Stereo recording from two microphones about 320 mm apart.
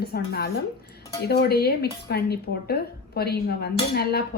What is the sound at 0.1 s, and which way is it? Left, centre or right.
Speech, left.